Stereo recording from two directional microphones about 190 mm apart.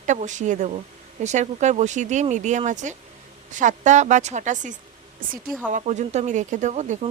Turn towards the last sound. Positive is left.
turn(degrees=-40)  # may be behind; listen again after turning